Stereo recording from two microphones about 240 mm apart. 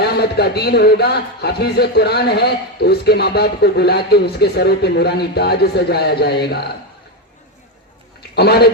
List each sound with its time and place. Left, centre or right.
0.0 s a man's voice: left
8.4 s a man's voice: left